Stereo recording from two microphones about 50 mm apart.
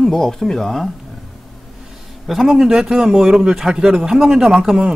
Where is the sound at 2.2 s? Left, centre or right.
Centre.